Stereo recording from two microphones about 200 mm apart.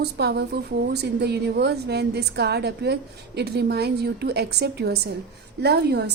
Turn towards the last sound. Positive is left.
turn(degrees=-55)  # may be behind; listen again after turning